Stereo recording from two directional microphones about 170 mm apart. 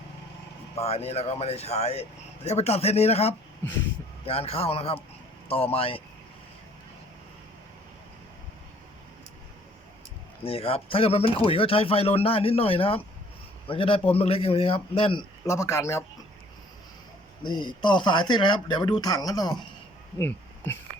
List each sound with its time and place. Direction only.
0.8 s speech: 35° left (ahead or behind)
10.4 s speech: 35° left (ahead or behind)
15.4 s a man's voice: 15° left (ahead or behind)
17.4 s speech: 25° left (ahead or behind)